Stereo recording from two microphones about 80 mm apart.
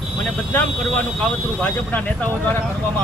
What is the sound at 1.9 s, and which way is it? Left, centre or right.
Speech, centre.